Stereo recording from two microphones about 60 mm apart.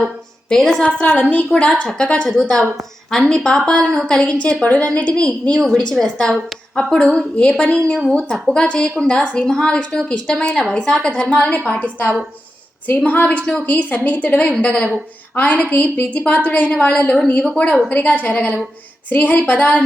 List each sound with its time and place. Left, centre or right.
0.5 s a woman's voice: centre
0.8 s a woman's voice: centre
13.1 s a woman's voice: left